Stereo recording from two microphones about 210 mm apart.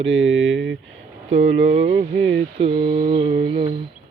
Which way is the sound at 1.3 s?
65° right (ahead or behind).